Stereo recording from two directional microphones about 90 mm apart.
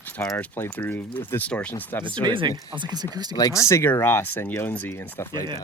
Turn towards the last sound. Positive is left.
turn(degrees=20)  # may be behind; listen again after turning